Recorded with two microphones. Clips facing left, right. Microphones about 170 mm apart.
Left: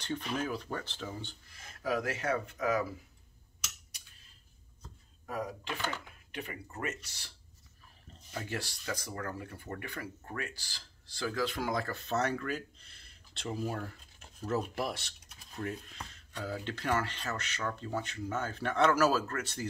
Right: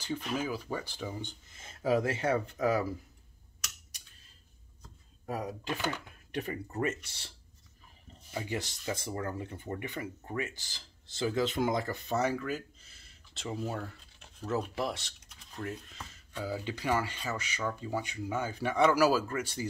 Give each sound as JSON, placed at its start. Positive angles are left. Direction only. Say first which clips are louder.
{"t": 0.0, "sound": "speech", "louder": "right 1 dB", "side_deg": -5}
{"t": 5.2, "sound": "speech", "louder": "right 2 dB", "side_deg": -45}
{"t": 8.3, "sound": "speech", "louder": "right 3 dB", "side_deg": -15}